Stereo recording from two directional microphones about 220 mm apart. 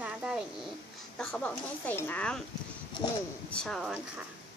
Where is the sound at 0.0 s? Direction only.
5° right (ahead or behind).